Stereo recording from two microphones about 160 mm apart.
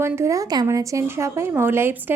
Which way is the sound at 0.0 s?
15° right (ahead or behind).